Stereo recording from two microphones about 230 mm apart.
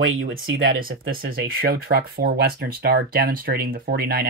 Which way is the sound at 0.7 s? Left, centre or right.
Right.